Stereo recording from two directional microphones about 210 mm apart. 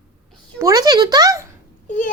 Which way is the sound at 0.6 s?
15° right (ahead or behind).